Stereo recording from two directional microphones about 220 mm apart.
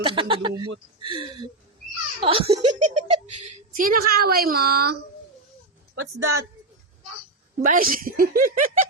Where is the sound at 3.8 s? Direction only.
40° right (ahead or behind).